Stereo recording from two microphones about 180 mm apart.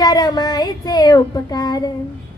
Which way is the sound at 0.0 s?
20° left (ahead or behind).